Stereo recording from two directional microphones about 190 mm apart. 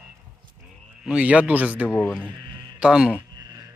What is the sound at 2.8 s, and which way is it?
Speech, 5° right (ahead or behind).